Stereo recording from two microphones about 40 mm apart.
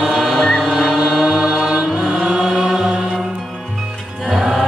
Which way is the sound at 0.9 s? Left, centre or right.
Centre.